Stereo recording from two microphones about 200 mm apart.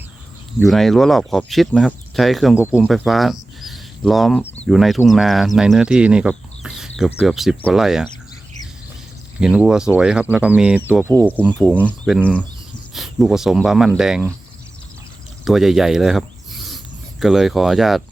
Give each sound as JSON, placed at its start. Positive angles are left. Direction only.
{"t": 0.6, "sound": "speech", "side_deg": 0}
{"t": 3.6, "sound": "a sound", "side_deg": 0}
{"t": 4.6, "sound": "speech", "side_deg": 0}
{"t": 9.4, "sound": "speech", "side_deg": -5}
{"t": 11.4, "sound": "speech", "side_deg": 5}
{"t": 15.4, "sound": "speech", "side_deg": 0}